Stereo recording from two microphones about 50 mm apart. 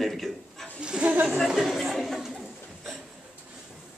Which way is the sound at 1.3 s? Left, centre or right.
Centre.